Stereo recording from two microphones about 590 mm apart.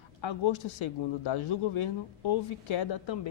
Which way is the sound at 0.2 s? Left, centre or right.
Left.